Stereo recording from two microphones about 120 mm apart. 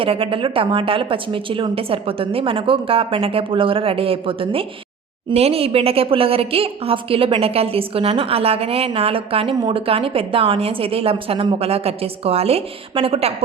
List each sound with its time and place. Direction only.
0.0 s a woman's voice: 50° right (ahead or behind)